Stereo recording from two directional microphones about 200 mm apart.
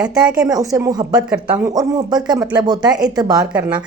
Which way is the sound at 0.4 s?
15° right (ahead or behind).